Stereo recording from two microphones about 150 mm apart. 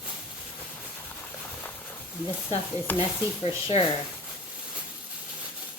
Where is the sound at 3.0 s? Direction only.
35° left (ahead or behind).